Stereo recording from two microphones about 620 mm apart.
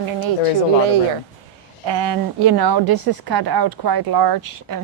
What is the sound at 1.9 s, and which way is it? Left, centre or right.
A woman's voice, right.